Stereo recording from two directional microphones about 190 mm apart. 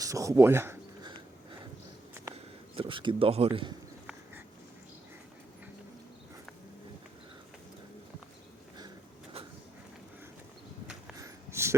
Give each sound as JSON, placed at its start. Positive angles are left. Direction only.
{"t": 0.0, "sound": "speech", "side_deg": -15}
{"t": 2.3, "sound": "speech", "side_deg": -30}
{"t": 11.2, "sound": "a sound", "side_deg": -15}